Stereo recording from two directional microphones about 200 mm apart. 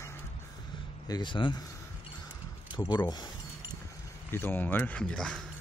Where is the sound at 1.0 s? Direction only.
20° left (ahead or behind).